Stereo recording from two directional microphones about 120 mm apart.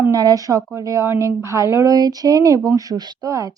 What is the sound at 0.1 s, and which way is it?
A woman's voice, 30° right (ahead or behind).